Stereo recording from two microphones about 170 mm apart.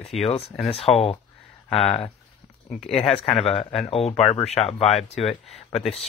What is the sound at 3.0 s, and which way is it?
Speech, 35° left (ahead or behind).